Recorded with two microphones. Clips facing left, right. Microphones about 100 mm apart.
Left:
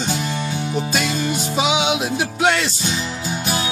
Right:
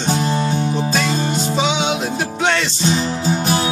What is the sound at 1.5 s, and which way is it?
Music, 5° left (ahead or behind).